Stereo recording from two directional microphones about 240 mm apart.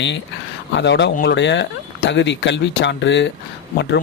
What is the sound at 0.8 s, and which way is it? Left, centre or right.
Speech, left.